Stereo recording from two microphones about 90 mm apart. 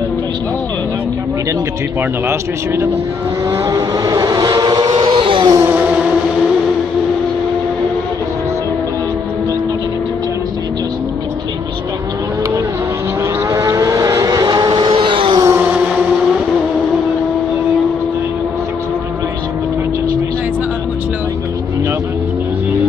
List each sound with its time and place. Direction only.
2.2 s speech: 30° right (ahead or behind)
3.4 s vehicle: 40° right (ahead or behind); by 5.5 s 70° right (ahead or behind)
5.7 s music: 15° right (ahead or behind)
13.5 s vehicle: 40° right (ahead or behind); by 15.4 s 70° right (ahead or behind)
15.6 s music: 15° right (ahead or behind)